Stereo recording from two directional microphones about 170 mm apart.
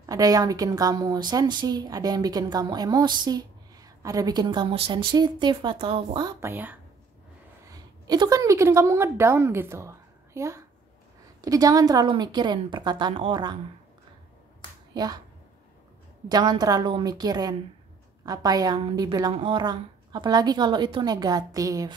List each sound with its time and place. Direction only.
0.0 s a woman's voice: 20° right (ahead or behind)
6.4 s speech: 10° right (ahead or behind)
7.7 s a woman's voice: 25° right (ahead or behind)
16.3 s a woman's voice: 25° right (ahead or behind)